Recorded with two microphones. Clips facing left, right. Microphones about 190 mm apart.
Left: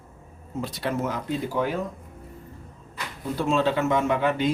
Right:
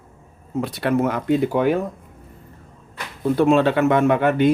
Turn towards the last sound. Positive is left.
turn(degrees=-60)  # may be behind; listen again after turning